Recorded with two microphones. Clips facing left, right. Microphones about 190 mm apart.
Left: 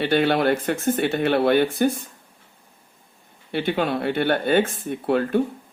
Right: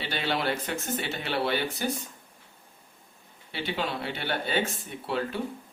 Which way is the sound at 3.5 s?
55° left (ahead or behind).